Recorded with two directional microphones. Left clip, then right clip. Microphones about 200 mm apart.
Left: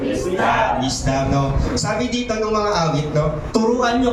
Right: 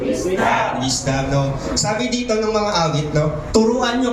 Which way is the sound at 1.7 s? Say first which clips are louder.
Right 2 dB; 40° right (ahead or behind).